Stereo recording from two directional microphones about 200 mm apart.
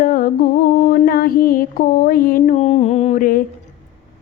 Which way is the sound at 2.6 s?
30° left (ahead or behind).